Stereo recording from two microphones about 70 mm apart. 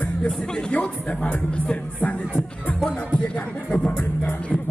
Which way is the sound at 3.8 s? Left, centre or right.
Left.